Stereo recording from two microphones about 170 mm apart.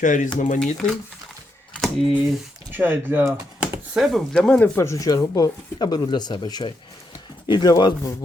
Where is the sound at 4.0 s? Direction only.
5° left (ahead or behind); by 8.1 s 20° left (ahead or behind).